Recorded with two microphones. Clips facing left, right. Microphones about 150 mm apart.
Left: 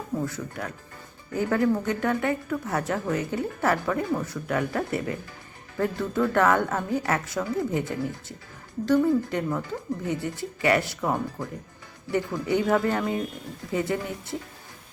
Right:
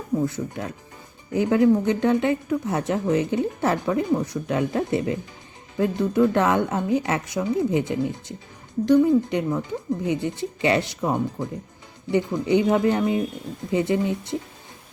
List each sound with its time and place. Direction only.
0.3 s speech: 20° right (ahead or behind)